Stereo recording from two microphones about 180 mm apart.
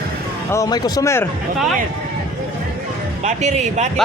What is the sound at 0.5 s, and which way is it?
Speech, 20° left (ahead or behind).